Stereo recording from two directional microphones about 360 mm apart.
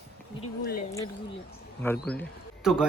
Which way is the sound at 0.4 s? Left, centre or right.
Left.